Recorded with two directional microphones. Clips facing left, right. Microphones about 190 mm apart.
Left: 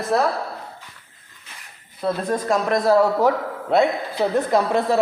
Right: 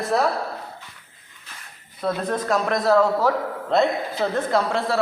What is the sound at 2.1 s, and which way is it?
A man's voice, 10° left (ahead or behind).